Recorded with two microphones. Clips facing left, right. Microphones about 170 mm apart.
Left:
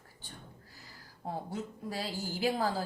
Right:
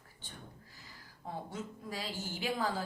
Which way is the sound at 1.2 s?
35° left (ahead or behind).